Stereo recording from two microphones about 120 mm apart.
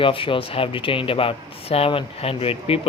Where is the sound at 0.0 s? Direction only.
45° left (ahead or behind).